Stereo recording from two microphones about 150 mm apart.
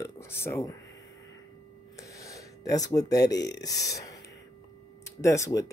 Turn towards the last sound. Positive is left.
turn(degrees=20)  # may be behind; listen again after turning